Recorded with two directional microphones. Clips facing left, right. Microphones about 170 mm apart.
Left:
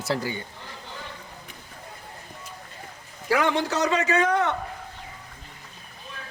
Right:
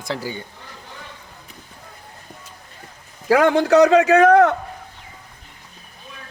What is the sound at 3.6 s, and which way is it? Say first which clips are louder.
Speech: right 11 dB; 70° right (ahead or behind).